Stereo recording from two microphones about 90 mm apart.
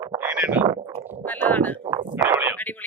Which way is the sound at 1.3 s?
15° left (ahead or behind).